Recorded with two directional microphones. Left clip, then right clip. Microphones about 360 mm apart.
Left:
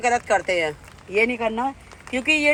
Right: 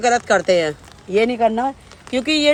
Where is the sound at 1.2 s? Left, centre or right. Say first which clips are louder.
Right 5 dB; right.